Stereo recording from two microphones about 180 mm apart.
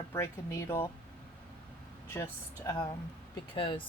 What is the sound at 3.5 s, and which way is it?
Speech, 30° left (ahead or behind).